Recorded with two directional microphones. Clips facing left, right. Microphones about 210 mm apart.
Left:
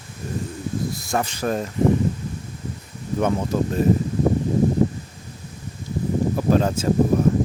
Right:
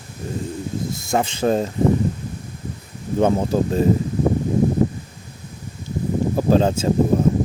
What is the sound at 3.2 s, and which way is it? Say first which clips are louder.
Speech: right 4 dB; 30° right (ahead or behind).